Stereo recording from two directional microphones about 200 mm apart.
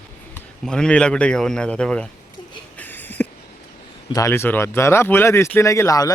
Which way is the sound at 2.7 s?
10° left (ahead or behind).